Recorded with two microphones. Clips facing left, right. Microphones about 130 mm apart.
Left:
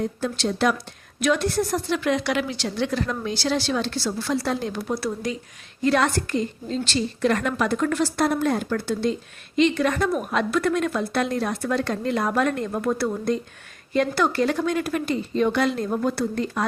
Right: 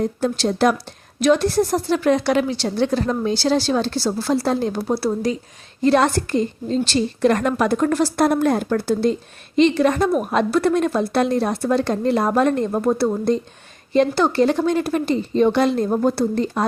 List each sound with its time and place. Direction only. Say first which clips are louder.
0.0 s a woman's voice: right 5 dB; 40° right (ahead or behind)